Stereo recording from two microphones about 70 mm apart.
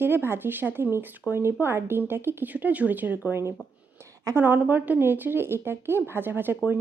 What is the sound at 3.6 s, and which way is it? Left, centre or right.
Speech, left.